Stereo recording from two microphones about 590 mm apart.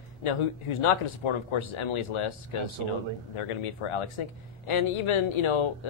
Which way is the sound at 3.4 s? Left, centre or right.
Left.